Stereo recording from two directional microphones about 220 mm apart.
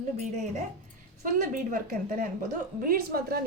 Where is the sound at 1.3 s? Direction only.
35° right (ahead or behind).